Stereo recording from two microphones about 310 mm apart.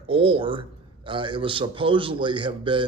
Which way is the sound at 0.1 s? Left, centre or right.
Centre.